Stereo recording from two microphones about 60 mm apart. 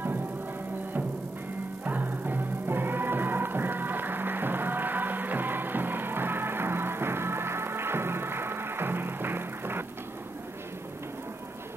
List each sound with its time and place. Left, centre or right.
1.9 s music: right